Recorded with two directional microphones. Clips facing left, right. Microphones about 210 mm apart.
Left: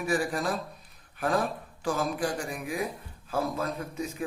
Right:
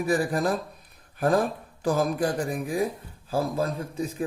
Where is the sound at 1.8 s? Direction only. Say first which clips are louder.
Right 5 dB; 40° right (ahead or behind).